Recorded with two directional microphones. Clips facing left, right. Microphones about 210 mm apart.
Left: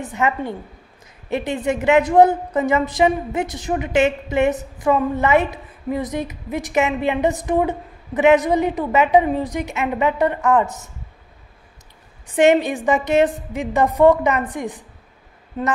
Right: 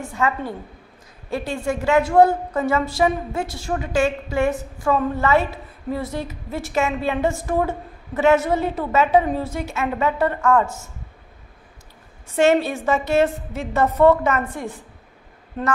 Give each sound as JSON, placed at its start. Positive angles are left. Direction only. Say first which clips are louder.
{"t": 0.0, "sound": "a woman's voice", "louder": "left 2 dB", "side_deg": 20}
{"t": 12.3, "sound": "a woman's voice", "louder": "left 2 dB", "side_deg": 15}